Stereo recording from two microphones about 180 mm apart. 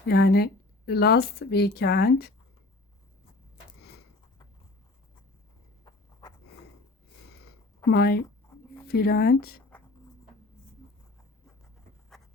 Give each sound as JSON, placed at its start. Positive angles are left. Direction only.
{"t": 0.1, "sound": "speech", "side_deg": 65}
{"t": 7.9, "sound": "speech", "side_deg": 60}